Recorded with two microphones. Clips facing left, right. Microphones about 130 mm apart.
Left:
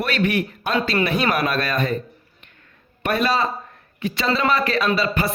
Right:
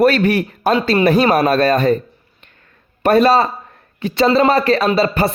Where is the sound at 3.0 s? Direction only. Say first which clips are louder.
Right 9 dB; 35° right (ahead or behind).